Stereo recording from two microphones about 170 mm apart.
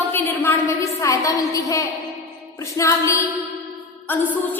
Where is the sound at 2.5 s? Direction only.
20° left (ahead or behind).